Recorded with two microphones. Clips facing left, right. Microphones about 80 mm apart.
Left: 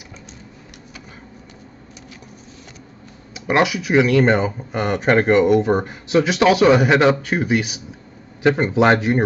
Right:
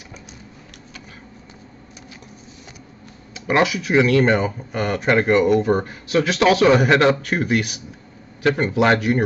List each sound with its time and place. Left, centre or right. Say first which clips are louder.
3.3 s speech: left 1 dB; centre
8.4 s speech: left 2 dB; centre